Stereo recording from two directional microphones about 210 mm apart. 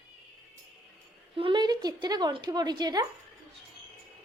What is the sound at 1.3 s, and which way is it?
A woman's voice, 25° right (ahead or behind).